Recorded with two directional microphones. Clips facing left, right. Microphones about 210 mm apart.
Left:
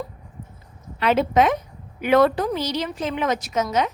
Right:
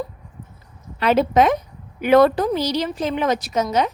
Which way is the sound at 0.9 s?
40° right (ahead or behind).